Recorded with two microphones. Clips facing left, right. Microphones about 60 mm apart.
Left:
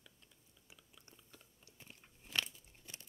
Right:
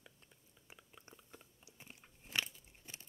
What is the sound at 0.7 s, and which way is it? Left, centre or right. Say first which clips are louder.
Biting: right 5 dB; right.